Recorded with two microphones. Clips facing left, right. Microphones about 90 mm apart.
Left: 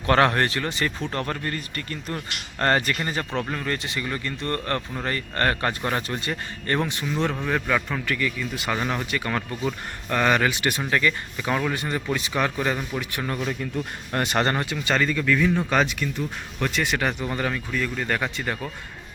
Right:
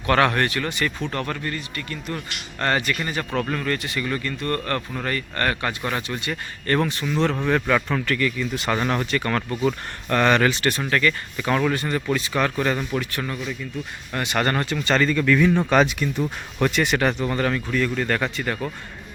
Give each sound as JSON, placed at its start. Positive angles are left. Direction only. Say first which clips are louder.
{"t": 0.0, "sound": "speech", "louder": "even", "side_deg": 30}
{"t": 3.4, "sound": "speech", "louder": "right 3 dB", "side_deg": 15}
{"t": 6.3, "sound": "speech", "louder": "right 4 dB", "side_deg": 20}
{"t": 13.2, "sound": "speech", "louder": "left 2 dB", "side_deg": 40}
{"t": 14.1, "sound": "speech", "louder": "left 1 dB", "side_deg": 40}
{"t": 14.4, "sound": "speech", "louder": "right 2 dB", "side_deg": 10}